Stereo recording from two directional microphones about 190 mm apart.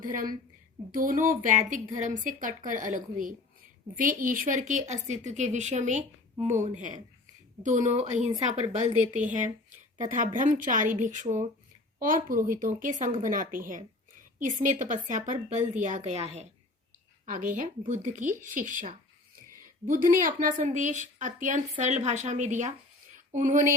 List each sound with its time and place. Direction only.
0.0 s a woman's voice: 45° right (ahead or behind)
17.2 s a woman's voice: 45° right (ahead or behind)